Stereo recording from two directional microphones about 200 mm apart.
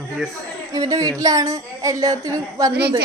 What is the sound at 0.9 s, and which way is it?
A woman's voice, 15° right (ahead or behind).